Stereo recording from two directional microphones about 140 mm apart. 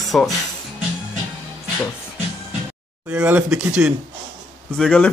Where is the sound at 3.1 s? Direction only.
10° right (ahead or behind).